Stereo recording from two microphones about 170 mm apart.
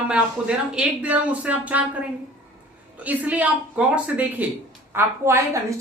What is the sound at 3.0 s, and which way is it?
A woman's voice, 10° right (ahead or behind).